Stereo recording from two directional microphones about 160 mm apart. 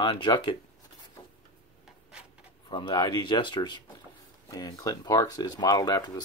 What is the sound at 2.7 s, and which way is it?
Speech, 30° left (ahead or behind).